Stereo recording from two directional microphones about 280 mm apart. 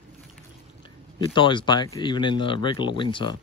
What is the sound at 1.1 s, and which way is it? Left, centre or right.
Speech, centre.